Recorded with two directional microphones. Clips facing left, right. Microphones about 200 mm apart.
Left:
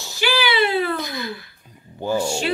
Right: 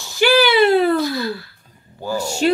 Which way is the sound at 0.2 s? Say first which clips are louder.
Right 7 dB; 45° right (ahead or behind).